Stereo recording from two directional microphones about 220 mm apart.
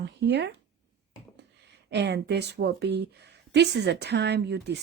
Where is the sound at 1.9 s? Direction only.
50° right (ahead or behind).